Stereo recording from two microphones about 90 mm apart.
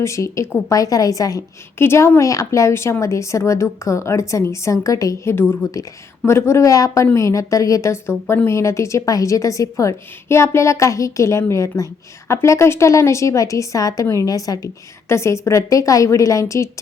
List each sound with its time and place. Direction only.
0.0 s speech: 35° left (ahead or behind)
1.8 s speech: 30° left (ahead or behind)
5.3 s a woman's voice: 25° left (ahead or behind)